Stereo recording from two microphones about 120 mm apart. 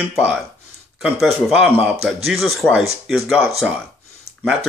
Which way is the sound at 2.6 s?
10° left (ahead or behind).